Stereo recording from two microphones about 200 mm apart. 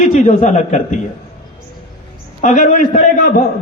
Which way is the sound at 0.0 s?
35° left (ahead or behind).